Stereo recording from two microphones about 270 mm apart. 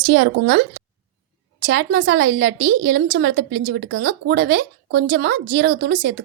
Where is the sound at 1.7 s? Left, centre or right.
Right.